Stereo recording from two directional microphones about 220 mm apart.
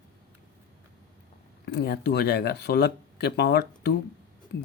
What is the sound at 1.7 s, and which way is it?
Speech, 45° left (ahead or behind).